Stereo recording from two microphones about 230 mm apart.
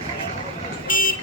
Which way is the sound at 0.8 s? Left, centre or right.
Left.